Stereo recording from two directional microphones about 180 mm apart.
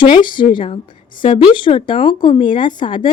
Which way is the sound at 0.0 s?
25° left (ahead or behind).